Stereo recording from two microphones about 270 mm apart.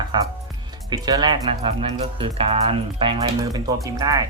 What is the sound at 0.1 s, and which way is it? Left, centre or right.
Speech, centre.